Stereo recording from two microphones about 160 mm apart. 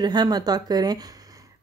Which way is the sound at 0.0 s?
25° right (ahead or behind).